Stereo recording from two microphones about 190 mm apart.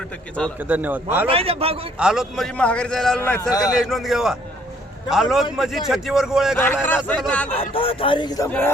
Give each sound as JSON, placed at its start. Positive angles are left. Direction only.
{"t": 0.6, "sound": "speech", "side_deg": -10}
{"t": 1.3, "sound": "a man's voice", "side_deg": -30}
{"t": 2.0, "sound": "a man's voice", "side_deg": -5}
{"t": 3.5, "sound": "speech", "side_deg": 20}
{"t": 3.8, "sound": "a man's voice", "side_deg": 0}
{"t": 6.8, "sound": "speech", "side_deg": 10}
{"t": 7.7, "sound": "speech", "side_deg": 30}
{"t": 8.4, "sound": "speech", "side_deg": 10}